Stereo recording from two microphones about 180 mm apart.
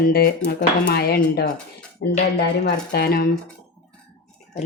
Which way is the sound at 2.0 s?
90° left.